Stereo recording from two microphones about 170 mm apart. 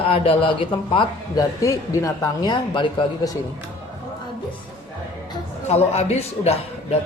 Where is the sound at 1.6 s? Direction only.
20° left (ahead or behind).